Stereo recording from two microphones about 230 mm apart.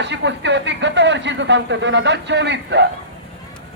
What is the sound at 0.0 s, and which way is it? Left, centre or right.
A man's voice, right.